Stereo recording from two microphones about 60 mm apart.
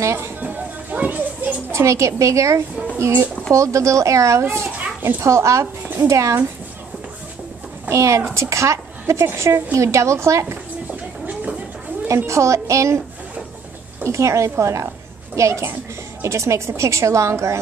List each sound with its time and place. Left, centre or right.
0.0 s speech: right
0.4 s music: right
1.7 s a child's voice: right
5.2 s a woman's voice: right
7.9 s a woman's voice: right
10.9 s a sound: right
12.3 s a woman's voice: right
14.0 s a woman's voice: right